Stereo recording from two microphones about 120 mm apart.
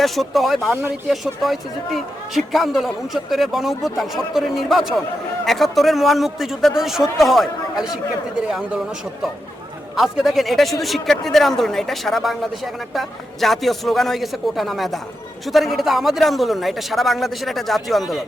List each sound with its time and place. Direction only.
0.0 s a man's voice: centre (ahead or behind)
0.7 s speech: 20° right (ahead or behind)
1.0 s a man's voice: centre (ahead or behind)
9.9 s a man's voice: centre (ahead or behind)